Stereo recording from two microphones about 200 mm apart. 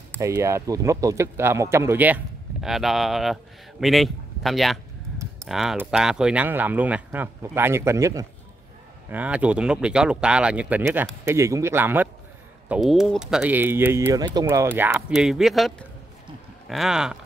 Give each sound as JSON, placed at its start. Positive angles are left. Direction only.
{"t": 0.2, "sound": "speech", "side_deg": -15}